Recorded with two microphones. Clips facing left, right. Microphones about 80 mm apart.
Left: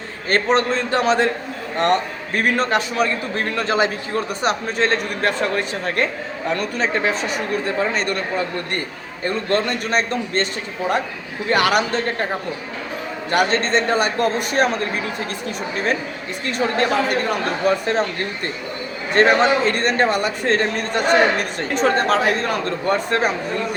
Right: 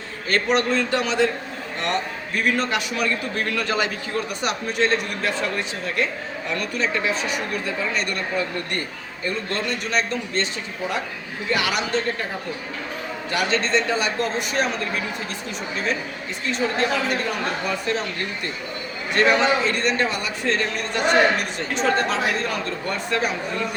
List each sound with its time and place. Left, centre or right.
0.3 s a man's voice: left
9.2 s speech: left
11.4 s speech: left
13.3 s speech: left
16.5 s speech: left
19.1 s a man's voice: left